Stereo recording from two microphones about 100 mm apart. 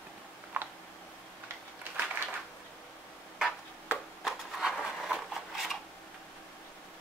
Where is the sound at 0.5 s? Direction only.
20° right (ahead or behind).